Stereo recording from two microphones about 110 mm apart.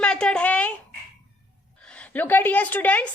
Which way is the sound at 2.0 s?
15° left (ahead or behind).